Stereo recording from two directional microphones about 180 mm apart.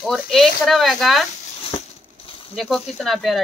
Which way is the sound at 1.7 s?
30° left (ahead or behind).